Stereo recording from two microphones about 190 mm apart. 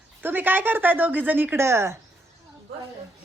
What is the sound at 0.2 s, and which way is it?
Speech, 10° right (ahead or behind).